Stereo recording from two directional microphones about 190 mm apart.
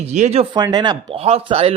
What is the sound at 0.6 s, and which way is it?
Speech, 20° right (ahead or behind).